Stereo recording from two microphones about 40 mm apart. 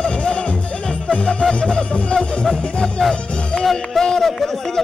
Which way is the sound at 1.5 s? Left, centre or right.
Left.